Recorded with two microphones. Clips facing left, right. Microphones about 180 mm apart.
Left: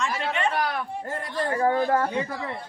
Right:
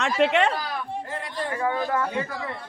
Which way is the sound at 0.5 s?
65° left (ahead or behind).